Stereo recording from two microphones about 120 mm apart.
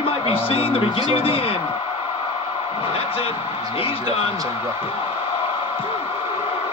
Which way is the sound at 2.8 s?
50° left (ahead or behind).